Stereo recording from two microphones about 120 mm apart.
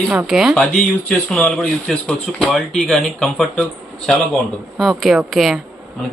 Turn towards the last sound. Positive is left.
turn(degrees=0)  # may be behind; listen again after turning